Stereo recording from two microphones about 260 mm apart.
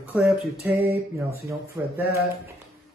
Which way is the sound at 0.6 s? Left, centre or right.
Right.